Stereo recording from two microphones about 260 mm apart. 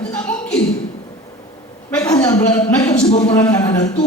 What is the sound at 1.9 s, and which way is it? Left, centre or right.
A woman's voice, centre.